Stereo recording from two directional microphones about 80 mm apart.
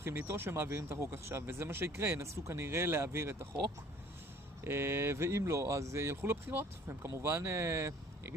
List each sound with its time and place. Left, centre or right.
0.2 s speech: right
4.6 s speech: right